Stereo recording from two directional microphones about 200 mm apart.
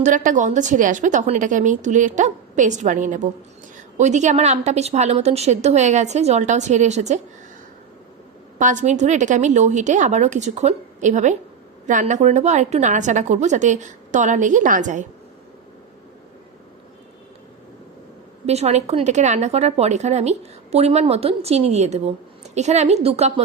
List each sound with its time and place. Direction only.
0.0 s speech: 40° right (ahead or behind)
8.5 s speech: 40° right (ahead or behind)
18.4 s speech: 30° right (ahead or behind)